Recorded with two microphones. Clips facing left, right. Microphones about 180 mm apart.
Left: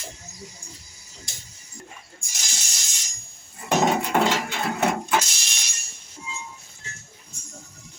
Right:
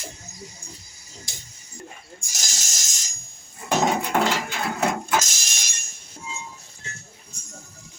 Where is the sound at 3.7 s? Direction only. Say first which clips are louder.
Left 1 dB; centre (ahead or behind).